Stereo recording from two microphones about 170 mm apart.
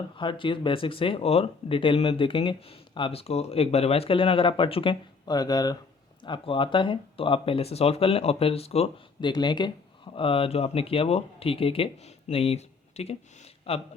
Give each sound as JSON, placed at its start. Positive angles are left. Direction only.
{"t": 0.2, "sound": "speech", "side_deg": 30}
{"t": 9.3, "sound": "speech", "side_deg": 25}